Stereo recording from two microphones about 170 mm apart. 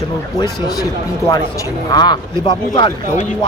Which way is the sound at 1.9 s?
25° left (ahead or behind).